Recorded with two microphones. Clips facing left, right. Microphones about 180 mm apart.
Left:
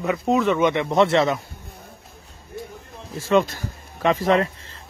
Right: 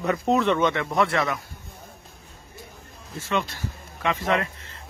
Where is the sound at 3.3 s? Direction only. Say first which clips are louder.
Left 8 dB; 45° left (ahead or behind).